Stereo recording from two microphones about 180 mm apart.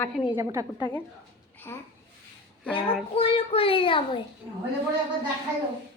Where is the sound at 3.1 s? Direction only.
30° left (ahead or behind).